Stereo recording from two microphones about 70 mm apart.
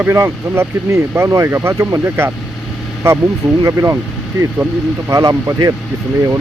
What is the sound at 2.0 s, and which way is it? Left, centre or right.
Speech, right.